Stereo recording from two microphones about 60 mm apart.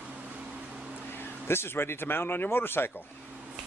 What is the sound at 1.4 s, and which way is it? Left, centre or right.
Speech, left.